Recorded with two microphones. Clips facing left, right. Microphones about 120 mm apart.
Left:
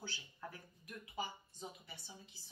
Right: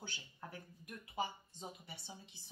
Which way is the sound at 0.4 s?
25° right (ahead or behind).